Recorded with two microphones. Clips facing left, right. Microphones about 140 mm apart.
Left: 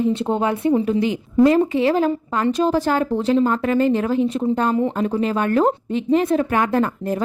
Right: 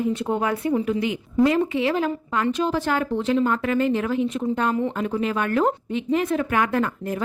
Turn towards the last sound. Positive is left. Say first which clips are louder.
# left 4 dB
turn(degrees=35)  # may be behind; listen again after turning